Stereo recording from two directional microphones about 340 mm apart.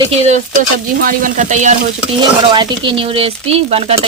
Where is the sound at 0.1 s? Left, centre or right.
Centre.